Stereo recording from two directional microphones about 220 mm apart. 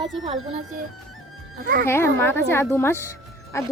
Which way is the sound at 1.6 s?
45° right (ahead or behind).